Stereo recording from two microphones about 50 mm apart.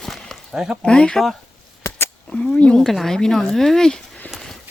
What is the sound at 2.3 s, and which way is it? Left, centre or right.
Speech, left.